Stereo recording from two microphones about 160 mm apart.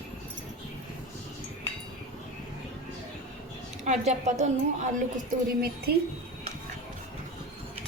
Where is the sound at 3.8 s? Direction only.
45° right (ahead or behind).